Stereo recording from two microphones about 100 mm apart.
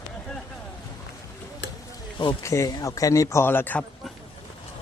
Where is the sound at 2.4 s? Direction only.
30° left (ahead or behind).